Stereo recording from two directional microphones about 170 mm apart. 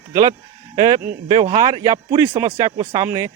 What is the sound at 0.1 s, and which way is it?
Speech, 20° right (ahead or behind).